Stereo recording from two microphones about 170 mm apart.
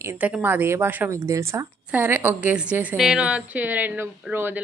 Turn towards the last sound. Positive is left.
turn(degrees=-10)  # may be behind; listen again after turning